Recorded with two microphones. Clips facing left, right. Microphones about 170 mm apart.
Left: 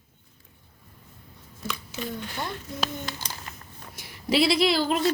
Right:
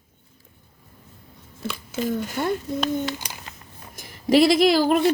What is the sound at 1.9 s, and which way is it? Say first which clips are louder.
Speech: right 12 dB; 50° right (ahead or behind).